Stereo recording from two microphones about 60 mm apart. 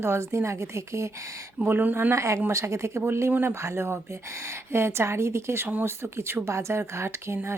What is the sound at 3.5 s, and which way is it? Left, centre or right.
A woman's voice, right.